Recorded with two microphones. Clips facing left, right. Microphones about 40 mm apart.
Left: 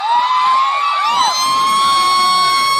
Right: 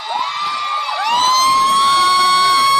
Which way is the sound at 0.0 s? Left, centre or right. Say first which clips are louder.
Left 7 dB; left.